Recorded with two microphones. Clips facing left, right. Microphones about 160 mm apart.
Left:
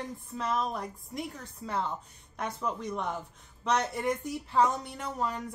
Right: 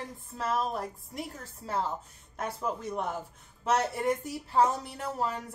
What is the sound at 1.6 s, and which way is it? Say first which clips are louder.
Speech: right 1 dB; 35° right (ahead or behind).